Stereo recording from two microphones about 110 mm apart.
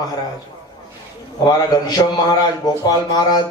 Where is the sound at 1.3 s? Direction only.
35° left (ahead or behind).